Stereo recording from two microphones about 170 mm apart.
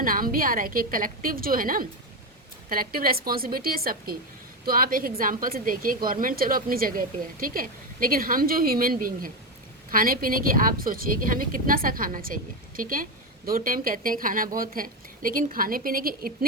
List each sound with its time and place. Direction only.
0.0 s a woman's voice: 55° right (ahead or behind)